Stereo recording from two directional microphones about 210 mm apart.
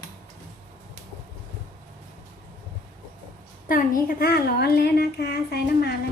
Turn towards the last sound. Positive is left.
turn(degrees=50)  # may be behind; listen again after turning